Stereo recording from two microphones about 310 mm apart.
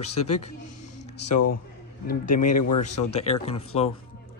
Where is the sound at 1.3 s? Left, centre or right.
Left.